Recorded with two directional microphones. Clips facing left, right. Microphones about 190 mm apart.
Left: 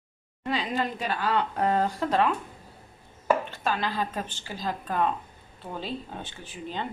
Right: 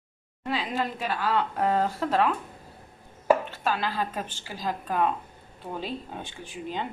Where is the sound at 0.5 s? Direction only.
5° right (ahead or behind).